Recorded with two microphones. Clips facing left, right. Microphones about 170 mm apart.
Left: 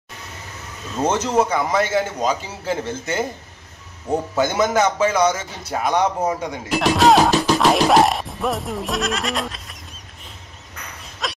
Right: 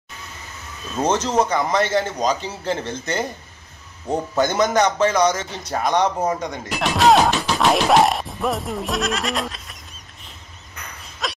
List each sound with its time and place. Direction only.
1.0 s speech: 10° left (ahead or behind)
7.2 s music: 40° left (ahead or behind)
7.5 s speech: centre (ahead or behind)
11.2 s a sound: centre (ahead or behind)